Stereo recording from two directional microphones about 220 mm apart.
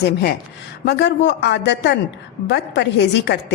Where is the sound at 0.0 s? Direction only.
50° left (ahead or behind).